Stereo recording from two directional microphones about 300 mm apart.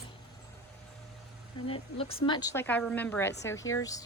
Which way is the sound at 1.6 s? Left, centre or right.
Centre.